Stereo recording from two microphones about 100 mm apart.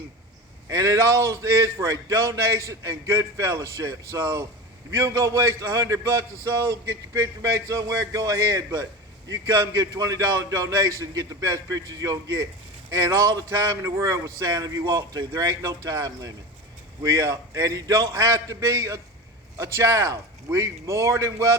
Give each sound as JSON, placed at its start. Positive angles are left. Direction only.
{"t": 0.7, "sound": "a man's voice", "side_deg": -35}